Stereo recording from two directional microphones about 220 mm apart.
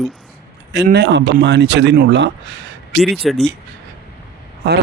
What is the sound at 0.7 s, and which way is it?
A man's voice, 50° right (ahead or behind).